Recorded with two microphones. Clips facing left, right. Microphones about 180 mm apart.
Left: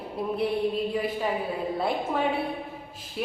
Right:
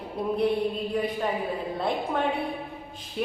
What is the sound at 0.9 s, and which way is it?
Speech, 5° left (ahead or behind).